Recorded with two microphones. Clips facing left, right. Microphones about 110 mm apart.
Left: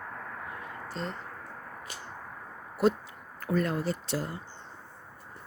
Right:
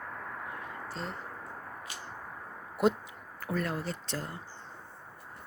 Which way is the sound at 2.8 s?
20° right (ahead or behind).